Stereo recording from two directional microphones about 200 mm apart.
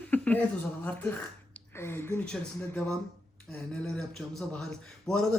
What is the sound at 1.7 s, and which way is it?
Speech, 10° left (ahead or behind).